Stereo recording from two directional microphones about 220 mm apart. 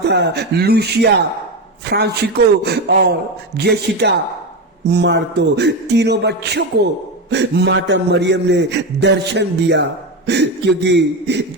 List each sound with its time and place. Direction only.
0.0 s a man's voice: 50° right (ahead or behind)